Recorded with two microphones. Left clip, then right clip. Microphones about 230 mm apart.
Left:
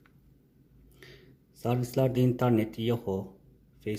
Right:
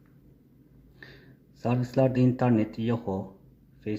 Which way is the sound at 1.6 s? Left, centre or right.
Centre.